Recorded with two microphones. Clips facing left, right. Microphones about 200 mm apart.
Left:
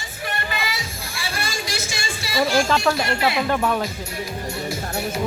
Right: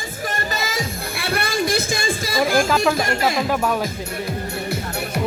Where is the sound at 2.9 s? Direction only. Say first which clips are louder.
Right 2 dB; 45° right (ahead or behind).